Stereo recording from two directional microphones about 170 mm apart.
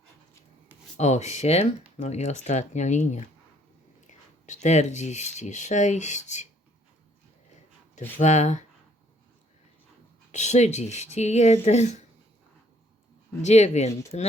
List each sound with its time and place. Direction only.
0.9 s speech: 40° left (ahead or behind)
8.2 s speech: 45° left (ahead or behind)
10.3 s speech: 45° left (ahead or behind)
13.4 s speech: 40° left (ahead or behind)